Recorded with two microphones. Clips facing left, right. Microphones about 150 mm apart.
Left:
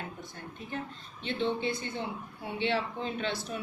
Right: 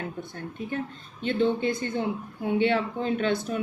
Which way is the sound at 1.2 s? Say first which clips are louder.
Right 7 dB; 45° right (ahead or behind).